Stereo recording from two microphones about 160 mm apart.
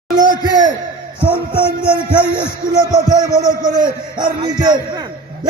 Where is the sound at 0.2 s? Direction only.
25° right (ahead or behind).